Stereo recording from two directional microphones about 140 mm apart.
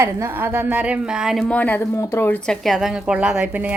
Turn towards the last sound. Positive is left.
turn(degrees=-10)  # may be behind; listen again after turning